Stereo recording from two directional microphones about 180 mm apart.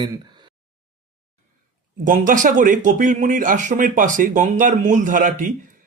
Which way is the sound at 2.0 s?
45° right (ahead or behind).